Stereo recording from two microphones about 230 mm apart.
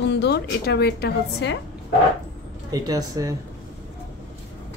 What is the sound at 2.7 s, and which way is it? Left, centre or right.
Speech, centre.